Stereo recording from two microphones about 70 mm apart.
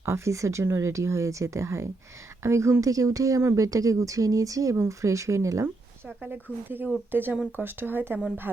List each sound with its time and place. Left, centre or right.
0.0 s speech: right
6.2 s speech: right